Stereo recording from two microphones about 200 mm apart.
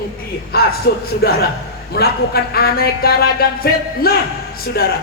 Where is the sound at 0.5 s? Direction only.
50° left (ahead or behind).